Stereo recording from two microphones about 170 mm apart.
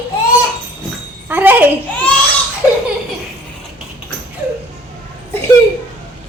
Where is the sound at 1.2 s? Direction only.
10° right (ahead or behind).